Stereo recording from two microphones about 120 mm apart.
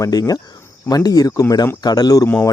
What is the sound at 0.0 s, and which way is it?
Speech, 30° left (ahead or behind).